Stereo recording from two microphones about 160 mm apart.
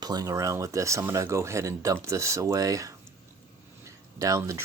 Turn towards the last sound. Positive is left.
turn(degrees=-20)  # may be behind; listen again after turning